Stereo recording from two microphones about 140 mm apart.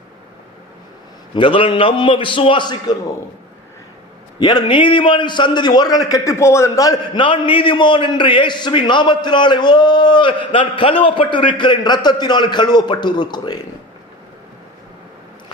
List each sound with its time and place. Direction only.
1.3 s a man's voice: 35° left (ahead or behind)
4.4 s a man's voice: 30° left (ahead or behind)